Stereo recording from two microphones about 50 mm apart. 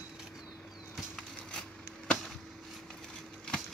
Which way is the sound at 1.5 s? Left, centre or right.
Centre.